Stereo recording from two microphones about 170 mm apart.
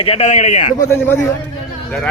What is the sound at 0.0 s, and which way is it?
Speech, 35° left (ahead or behind).